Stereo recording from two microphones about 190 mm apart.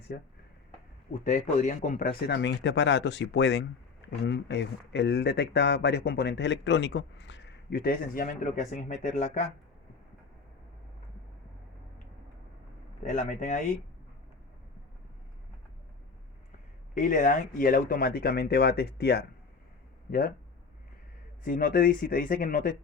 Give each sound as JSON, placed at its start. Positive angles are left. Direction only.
{"t": 0.1, "sound": "speech", "side_deg": 60}
{"t": 1.1, "sound": "speech", "side_deg": 40}
{"t": 13.1, "sound": "speech", "side_deg": 40}
{"t": 17.0, "sound": "speech", "side_deg": 45}
{"t": 21.4, "sound": "speech", "side_deg": 50}